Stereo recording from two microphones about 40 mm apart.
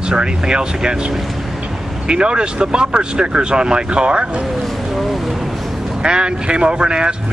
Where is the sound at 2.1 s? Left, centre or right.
Right.